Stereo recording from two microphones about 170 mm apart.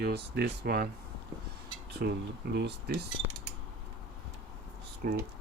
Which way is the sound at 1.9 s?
75° right (ahead or behind).